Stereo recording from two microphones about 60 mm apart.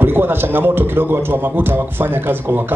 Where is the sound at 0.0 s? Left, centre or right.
Right.